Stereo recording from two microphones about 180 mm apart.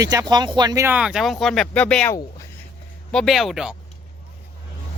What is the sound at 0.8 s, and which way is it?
Speech, 5° right (ahead or behind).